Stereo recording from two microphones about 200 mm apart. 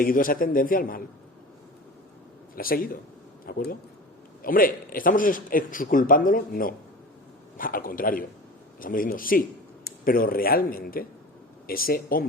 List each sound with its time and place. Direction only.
0.0 s speech: 45° left (ahead or behind)
2.6 s speech: 45° left (ahead or behind)